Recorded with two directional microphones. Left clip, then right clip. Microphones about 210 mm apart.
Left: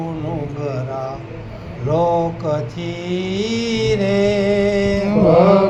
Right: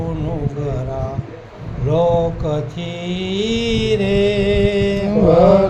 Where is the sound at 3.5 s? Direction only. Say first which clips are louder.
Right 1 dB; 55° right (ahead or behind).